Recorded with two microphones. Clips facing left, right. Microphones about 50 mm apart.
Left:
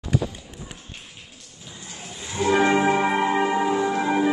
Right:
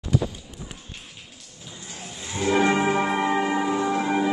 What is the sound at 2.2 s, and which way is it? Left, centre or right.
Music, centre.